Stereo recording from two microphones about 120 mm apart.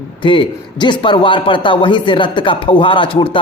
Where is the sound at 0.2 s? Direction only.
40° left (ahead or behind).